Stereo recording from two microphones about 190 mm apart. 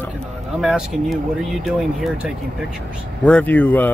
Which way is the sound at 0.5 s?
Centre (ahead or behind).